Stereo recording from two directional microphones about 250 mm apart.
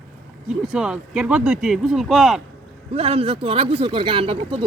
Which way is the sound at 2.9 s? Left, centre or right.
Right.